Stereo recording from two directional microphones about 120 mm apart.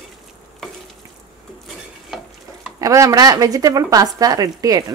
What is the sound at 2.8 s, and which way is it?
Speech, 25° right (ahead or behind).